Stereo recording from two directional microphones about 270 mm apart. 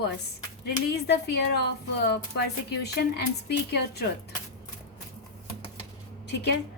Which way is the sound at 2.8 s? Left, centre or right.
Left.